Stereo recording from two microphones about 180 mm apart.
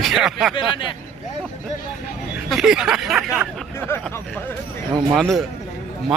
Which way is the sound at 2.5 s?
Centre (ahead or behind).